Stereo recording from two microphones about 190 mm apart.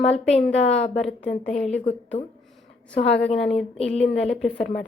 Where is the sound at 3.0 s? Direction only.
65° left (ahead or behind).